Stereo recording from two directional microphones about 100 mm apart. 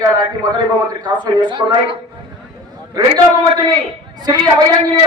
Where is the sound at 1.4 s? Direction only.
55° right (ahead or behind).